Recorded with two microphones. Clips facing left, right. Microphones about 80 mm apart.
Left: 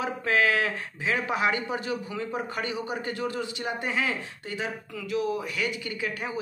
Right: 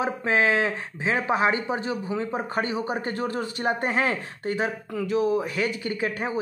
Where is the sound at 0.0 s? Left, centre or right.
Right.